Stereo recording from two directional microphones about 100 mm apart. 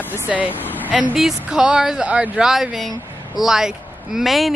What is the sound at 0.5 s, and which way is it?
Speech, 20° left (ahead or behind).